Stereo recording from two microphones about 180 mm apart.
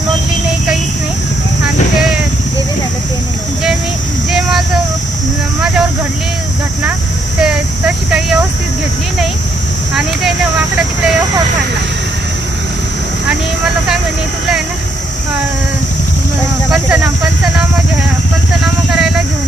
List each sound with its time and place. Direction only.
4.3 s a sound: 5° right (ahead or behind)
7.4 s speech: 5° right (ahead or behind)
16.7 s speech: 10° right (ahead or behind)
18.9 s speech: 5° right (ahead or behind)